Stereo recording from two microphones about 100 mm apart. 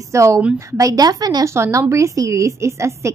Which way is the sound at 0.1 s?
30° right (ahead or behind).